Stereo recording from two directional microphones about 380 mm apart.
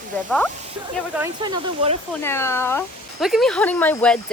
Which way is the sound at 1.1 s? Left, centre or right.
Centre.